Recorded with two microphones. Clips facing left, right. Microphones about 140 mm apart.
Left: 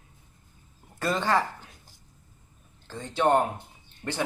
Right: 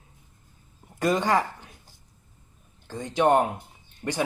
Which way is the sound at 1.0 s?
15° right (ahead or behind).